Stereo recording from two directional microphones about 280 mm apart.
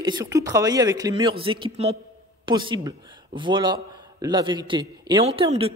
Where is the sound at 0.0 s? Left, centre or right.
Centre.